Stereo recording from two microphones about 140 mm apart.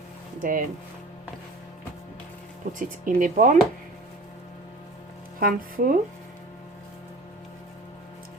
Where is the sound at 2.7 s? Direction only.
70° right (ahead or behind).